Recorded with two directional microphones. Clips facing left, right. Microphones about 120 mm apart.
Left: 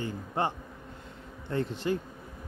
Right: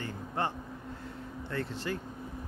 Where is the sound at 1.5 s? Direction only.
20° left (ahead or behind).